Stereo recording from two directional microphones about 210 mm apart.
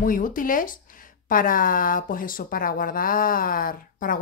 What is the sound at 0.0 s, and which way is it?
Speech, 40° left (ahead or behind).